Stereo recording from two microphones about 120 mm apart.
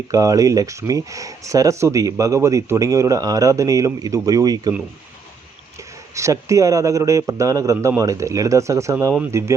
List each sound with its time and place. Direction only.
0.1 s speech: 30° right (ahead or behind)
6.1 s speech: 25° right (ahead or behind)